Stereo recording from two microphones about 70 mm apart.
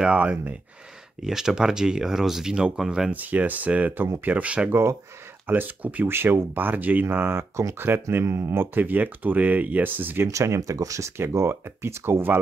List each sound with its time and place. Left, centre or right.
0.0 s speech: centre
3.1 s speech: right
4.6 s speech: right
5.5 s speech: right
6.0 s speech: right
10.2 s speech: right